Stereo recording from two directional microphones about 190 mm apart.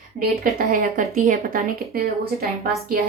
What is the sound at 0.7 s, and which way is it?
A woman's voice, 45° right (ahead or behind).